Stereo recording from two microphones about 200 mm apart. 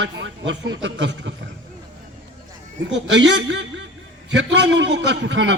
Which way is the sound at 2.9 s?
65° right (ahead or behind).